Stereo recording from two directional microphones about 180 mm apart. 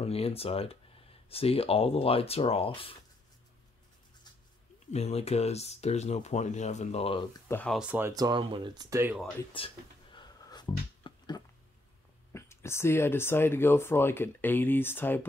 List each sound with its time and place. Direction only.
0.0 s speech: 35° left (ahead or behind)
4.9 s speech: 35° left (ahead or behind)
7.4 s speech: 10° left (ahead or behind)
7.7 s speech: 5° right (ahead or behind)
8.1 s speech: 20° right (ahead or behind)
9.6 s speech: 30° left (ahead or behind)
10.1 s a sound: 25° left (ahead or behind)
12.3 s speech: 15° left (ahead or behind)